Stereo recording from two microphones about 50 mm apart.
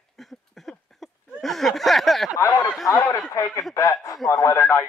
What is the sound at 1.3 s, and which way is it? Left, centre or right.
Speech, centre.